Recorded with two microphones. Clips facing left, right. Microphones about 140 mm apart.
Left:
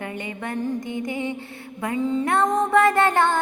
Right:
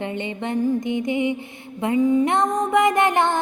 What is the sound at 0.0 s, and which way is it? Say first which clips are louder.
Mantra: right 4 dB; 25° right (ahead or behind).